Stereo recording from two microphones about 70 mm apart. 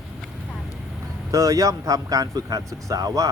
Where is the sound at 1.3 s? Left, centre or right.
Right.